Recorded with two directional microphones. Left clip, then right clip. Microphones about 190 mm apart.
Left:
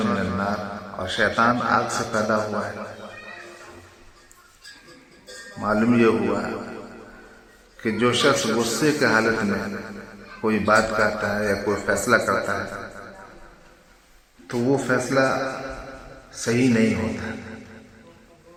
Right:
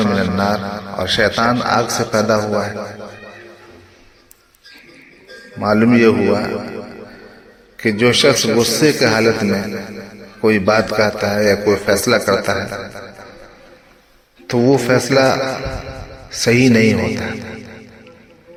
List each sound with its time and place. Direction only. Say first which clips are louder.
0.0 s a man's voice: right 7 dB; 40° right (ahead or behind)
5.5 s a man's voice: right 7 dB; 30° right (ahead or behind)
14.4 s a man's voice: right 9 dB; 35° right (ahead or behind)